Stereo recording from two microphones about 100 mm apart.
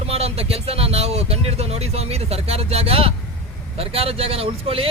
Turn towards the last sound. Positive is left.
turn(degrees=-75)  # may be behind; listen again after turning